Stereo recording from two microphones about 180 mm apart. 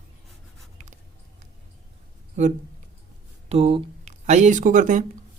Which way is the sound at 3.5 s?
35° right (ahead or behind).